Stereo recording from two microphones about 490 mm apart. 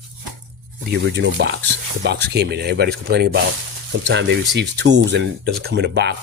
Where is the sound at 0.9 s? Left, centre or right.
Right.